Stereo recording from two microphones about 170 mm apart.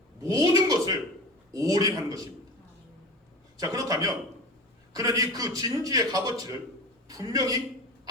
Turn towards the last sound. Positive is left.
turn(degrees=-20)  # may be behind; listen again after turning